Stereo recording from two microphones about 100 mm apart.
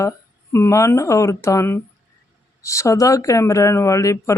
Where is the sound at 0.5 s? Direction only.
30° left (ahead or behind).